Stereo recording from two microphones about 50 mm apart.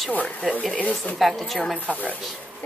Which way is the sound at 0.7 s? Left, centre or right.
Left.